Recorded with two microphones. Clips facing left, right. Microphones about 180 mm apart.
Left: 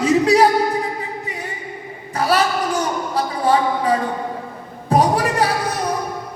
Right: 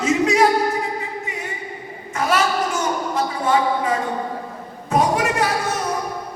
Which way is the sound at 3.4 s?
35° left (ahead or behind).